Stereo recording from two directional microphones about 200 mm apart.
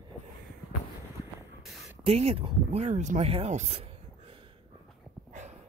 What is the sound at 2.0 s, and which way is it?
Speech, 30° right (ahead or behind).